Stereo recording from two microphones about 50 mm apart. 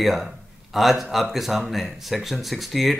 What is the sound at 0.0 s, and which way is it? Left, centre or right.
Speech, centre.